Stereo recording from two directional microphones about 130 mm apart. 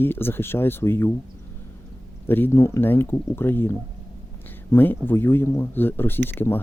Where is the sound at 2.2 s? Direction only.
15° left (ahead or behind).